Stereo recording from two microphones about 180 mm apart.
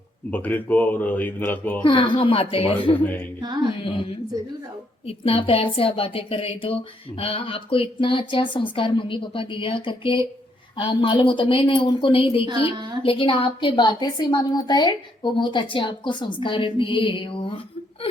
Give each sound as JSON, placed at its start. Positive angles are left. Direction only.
{"t": 0.3, "sound": "speech", "side_deg": 10}
{"t": 1.8, "sound": "a woman's voice", "side_deg": 25}
{"t": 3.4, "sound": "a sound", "side_deg": -25}
{"t": 3.8, "sound": "a woman's voice", "side_deg": 30}